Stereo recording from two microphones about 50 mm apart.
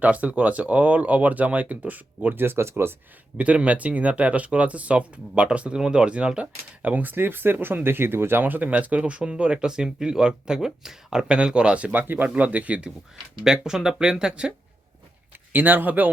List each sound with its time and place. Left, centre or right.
0.0 s speech: right
2.3 s speech: right
3.3 s speech: right
6.9 s speech: right
11.9 s speech: right
13.4 s speech: centre
15.5 s speech: right